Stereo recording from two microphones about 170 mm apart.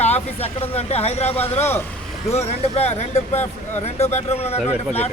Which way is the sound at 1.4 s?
10° left (ahead or behind).